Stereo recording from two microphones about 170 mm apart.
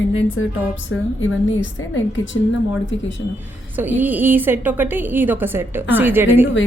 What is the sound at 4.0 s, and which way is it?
Speech, 10° right (ahead or behind).